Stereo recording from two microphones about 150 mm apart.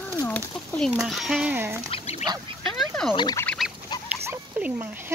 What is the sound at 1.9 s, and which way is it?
Goose, 45° left (ahead or behind).